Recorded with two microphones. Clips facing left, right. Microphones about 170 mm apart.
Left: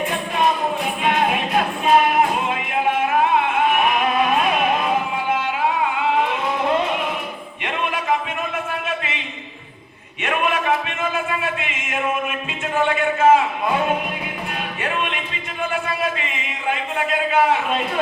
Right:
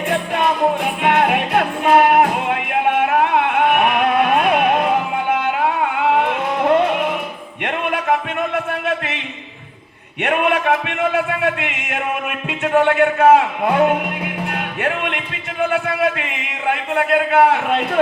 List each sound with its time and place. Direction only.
0.1 s music: 65° right (ahead or behind)
10.2 s speech: 65° right (ahead or behind)